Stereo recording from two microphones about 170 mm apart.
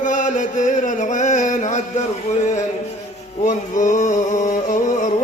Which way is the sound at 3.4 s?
45° left (ahead or behind).